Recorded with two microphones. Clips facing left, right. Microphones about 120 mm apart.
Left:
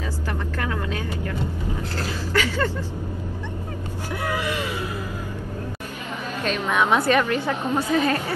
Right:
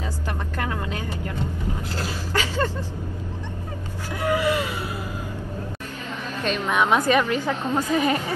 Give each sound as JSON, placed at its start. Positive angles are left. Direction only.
{"t": 0.6, "sound": "vehicle", "side_deg": -20}
{"t": 2.0, "sound": "a sound", "side_deg": -15}
{"t": 4.4, "sound": "gasp", "side_deg": -15}
{"t": 6.4, "sound": "a woman's voice", "side_deg": -10}